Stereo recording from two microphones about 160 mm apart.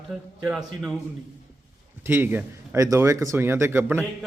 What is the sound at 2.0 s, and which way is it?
A man's voice, 15° right (ahead or behind).